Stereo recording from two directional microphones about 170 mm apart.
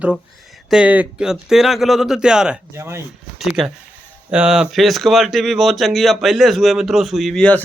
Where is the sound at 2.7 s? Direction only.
15° right (ahead or behind).